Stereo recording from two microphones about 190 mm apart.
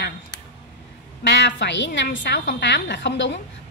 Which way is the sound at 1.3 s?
65° left (ahead or behind).